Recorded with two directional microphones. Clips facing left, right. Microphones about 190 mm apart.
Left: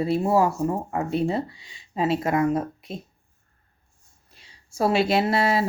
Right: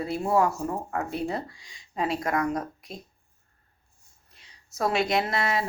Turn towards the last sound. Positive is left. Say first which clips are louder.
# left 5 dB
turn(degrees=30)  # may be behind; listen again after turning